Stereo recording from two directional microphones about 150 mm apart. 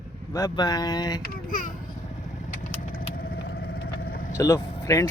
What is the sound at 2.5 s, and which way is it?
Vehicle, 60° left (ahead or behind).